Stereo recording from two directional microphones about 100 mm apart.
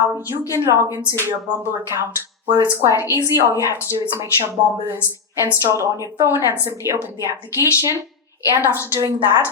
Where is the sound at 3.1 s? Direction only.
30° left (ahead or behind).